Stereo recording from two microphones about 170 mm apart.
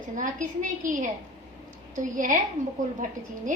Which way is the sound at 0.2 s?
50° right (ahead or behind).